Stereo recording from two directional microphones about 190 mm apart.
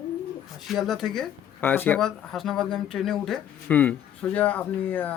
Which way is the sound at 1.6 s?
10° left (ahead or behind).